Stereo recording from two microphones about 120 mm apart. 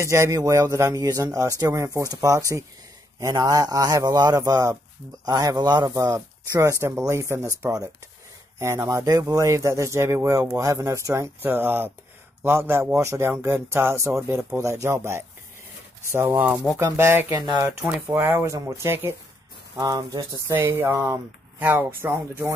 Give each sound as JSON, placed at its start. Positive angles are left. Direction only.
{"t": 0.0, "sound": "speech", "side_deg": -25}
{"t": 16.3, "sound": "speech", "side_deg": -10}
{"t": 16.7, "sound": "speech", "side_deg": -20}
{"t": 17.3, "sound": "speech", "side_deg": -30}
{"t": 19.8, "sound": "speech", "side_deg": -35}
{"t": 20.5, "sound": "speech", "side_deg": -15}